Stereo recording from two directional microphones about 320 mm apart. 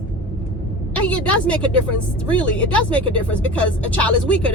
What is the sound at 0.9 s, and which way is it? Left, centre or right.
Speech, centre.